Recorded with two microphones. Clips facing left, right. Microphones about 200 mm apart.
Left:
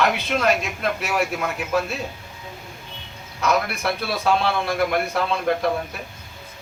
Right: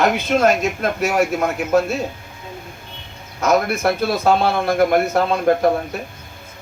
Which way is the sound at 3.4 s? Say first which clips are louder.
Right 5 dB; 45° right (ahead or behind).